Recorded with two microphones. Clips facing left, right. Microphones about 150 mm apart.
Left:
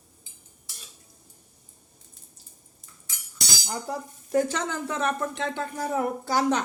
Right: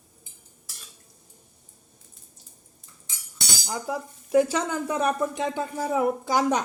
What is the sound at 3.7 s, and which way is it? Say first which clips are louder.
Speech: right 2 dB; 5° right (ahead or behind).